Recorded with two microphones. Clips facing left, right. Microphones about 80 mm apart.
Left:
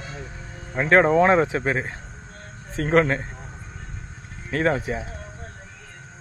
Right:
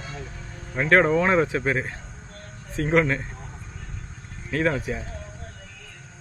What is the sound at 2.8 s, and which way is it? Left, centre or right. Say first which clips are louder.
Speech: left 2 dB; left.